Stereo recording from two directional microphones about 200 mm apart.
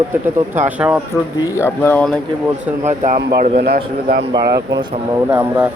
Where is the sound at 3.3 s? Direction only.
40° right (ahead or behind).